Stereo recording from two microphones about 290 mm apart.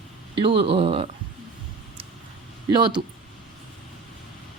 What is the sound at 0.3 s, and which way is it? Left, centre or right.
Speech, centre.